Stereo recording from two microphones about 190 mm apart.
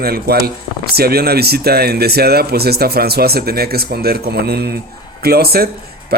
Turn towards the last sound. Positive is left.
turn(degrees=-55)  # may be behind; listen again after turning